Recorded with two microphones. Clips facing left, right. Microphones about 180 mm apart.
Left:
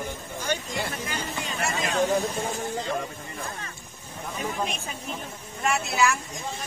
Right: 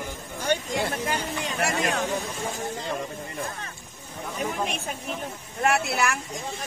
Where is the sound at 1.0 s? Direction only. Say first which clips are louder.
Right 4 dB; 55° right (ahead or behind).